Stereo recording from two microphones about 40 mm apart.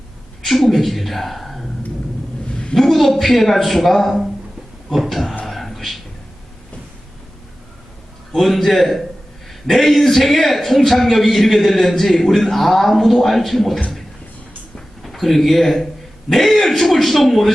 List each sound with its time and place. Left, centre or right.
0.4 s speech: centre
2.5 s a sound: left
2.7 s a man's voice: centre
5.5 s beatboxing: centre
8.3 s a man's voice: centre
15.0 s a man's voice: centre